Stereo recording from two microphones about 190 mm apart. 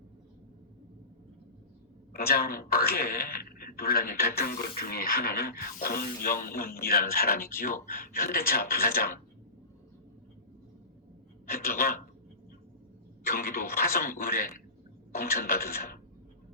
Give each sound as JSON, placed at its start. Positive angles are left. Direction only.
{"t": 2.1, "sound": "a man's voice", "side_deg": 50}
{"t": 11.4, "sound": "a man's voice", "side_deg": 50}
{"t": 13.2, "sound": "a man's voice", "side_deg": 50}